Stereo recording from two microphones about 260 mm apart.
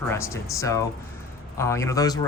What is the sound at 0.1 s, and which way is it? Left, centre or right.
Speech, centre.